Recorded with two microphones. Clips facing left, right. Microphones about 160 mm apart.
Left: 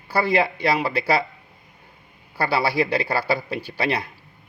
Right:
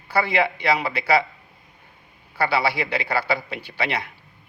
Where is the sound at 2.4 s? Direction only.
40° left (ahead or behind).